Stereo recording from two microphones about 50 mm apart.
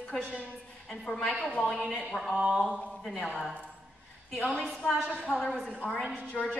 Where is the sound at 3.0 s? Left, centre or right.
Centre.